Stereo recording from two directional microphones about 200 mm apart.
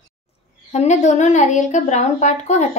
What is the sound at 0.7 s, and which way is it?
A woman's voice, 35° left (ahead or behind).